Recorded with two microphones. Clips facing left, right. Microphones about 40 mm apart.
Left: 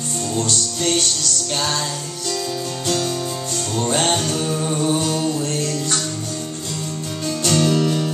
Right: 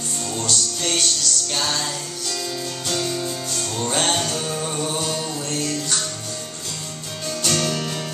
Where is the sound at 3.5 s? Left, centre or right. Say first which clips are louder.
Left 4 dB; centre.